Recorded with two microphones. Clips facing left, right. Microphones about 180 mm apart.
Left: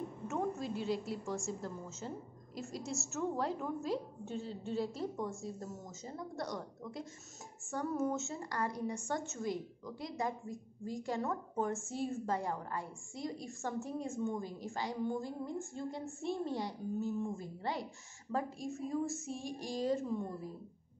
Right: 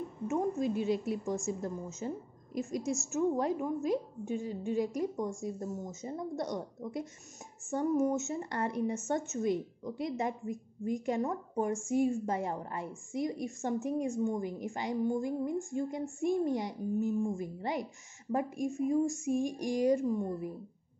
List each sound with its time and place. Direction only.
0.3 s a woman's voice: 20° right (ahead or behind)